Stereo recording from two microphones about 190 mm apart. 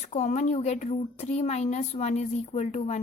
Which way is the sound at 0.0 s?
35° left (ahead or behind).